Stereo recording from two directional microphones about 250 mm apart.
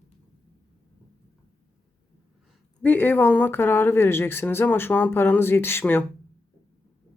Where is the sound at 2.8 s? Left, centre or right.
Centre.